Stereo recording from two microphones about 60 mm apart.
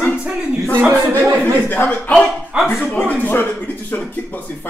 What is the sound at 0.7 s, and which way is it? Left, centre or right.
Speech, right.